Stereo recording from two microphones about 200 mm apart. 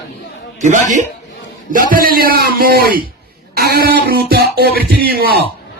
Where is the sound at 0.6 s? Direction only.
35° right (ahead or behind).